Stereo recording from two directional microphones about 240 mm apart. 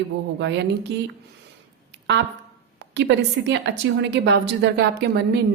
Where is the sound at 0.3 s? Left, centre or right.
Right.